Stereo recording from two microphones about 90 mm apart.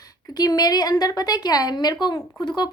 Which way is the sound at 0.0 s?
45° left (ahead or behind).